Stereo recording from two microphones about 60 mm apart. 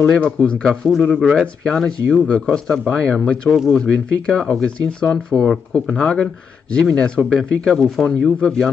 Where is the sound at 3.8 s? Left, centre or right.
Centre.